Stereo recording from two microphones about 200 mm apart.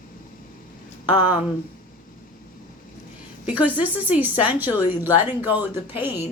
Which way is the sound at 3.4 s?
5° right (ahead or behind).